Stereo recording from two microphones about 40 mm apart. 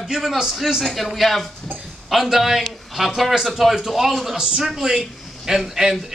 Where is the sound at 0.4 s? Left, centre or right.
Centre.